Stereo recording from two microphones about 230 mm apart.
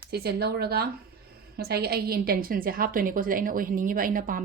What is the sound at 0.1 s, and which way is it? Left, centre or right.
A woman's voice, right.